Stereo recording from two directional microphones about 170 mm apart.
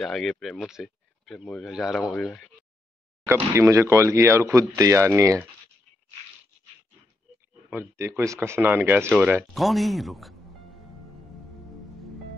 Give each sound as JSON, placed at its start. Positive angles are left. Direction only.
{"t": 0.0, "sound": "speech", "side_deg": 0}
{"t": 3.3, "sound": "speech", "side_deg": -15}
{"t": 7.7, "sound": "speech", "side_deg": -15}